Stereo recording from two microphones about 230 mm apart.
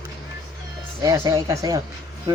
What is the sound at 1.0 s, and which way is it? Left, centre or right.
Speech, centre.